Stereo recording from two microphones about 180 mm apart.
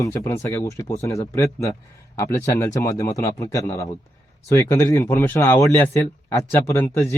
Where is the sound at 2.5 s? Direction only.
15° left (ahead or behind).